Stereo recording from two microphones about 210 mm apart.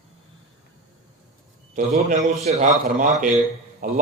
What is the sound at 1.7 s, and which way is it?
A man's voice, 35° right (ahead or behind).